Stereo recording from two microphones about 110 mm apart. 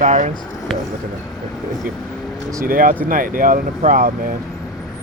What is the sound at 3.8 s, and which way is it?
Speech, 75° right (ahead or behind).